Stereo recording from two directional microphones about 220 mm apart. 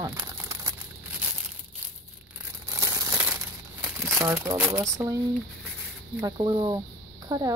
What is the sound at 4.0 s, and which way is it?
Speech, 10° right (ahead or behind).